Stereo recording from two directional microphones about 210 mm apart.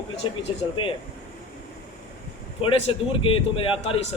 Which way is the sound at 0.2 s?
25° left (ahead or behind).